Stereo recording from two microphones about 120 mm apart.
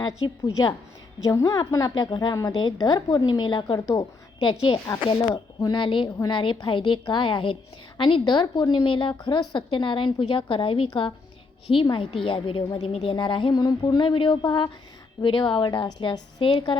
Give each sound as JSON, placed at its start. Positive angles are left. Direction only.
{"t": 0.2, "sound": "a woman's voice", "side_deg": 35}
{"t": 3.8, "sound": "speech", "side_deg": 30}
{"t": 4.4, "sound": "a woman's voice", "side_deg": 40}
{"t": 5.3, "sound": "a woman's voice", "side_deg": 25}
{"t": 5.7, "sound": "a woman's voice", "side_deg": 45}